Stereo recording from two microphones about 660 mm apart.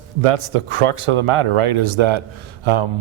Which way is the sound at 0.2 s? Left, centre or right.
Right.